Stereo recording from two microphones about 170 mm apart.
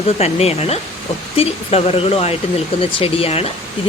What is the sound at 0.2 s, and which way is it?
Speech, 35° left (ahead or behind).